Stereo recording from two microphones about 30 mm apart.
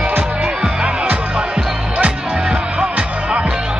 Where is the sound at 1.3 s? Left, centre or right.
Right.